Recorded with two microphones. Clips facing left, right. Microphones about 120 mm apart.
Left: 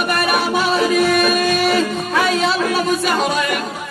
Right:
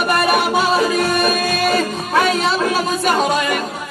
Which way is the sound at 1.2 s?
45° right (ahead or behind).